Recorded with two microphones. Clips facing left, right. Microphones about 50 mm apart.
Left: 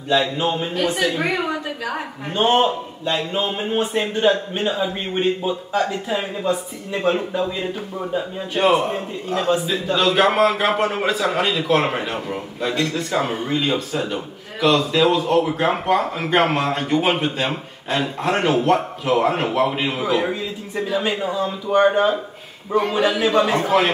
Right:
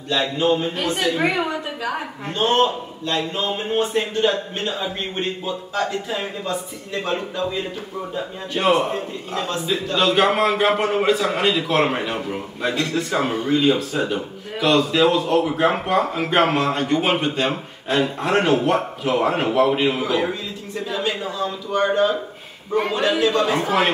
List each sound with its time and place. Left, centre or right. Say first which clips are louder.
0.1 s a man's voice: even; centre
2.2 s a man's voice: left 1 dB; centre
9.3 s a man's voice: left 4 dB; centre
20.7 s a man's voice: left 2 dB; centre
23.5 s speech: left 2 dB; centre